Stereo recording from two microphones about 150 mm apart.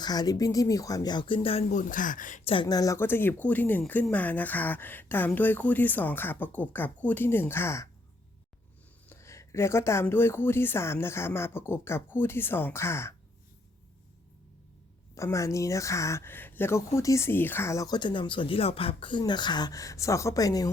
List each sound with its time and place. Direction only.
0.0 s speech: 25° left (ahead or behind)
1.7 s speech: 60° left (ahead or behind)
2.5 s speech: 30° left (ahead or behind)
9.0 s speech: 20° left (ahead or behind)
15.1 s speech: 20° left (ahead or behind)